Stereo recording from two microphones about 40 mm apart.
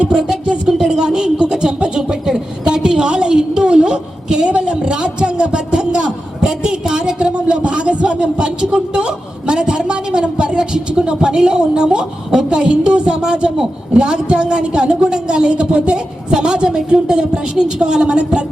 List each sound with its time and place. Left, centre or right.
0.1 s a woman's voice: centre
0.7 s a sound: centre
8.7 s a woman's voice: right